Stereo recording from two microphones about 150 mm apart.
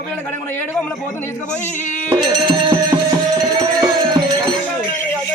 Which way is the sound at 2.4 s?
25° right (ahead or behind).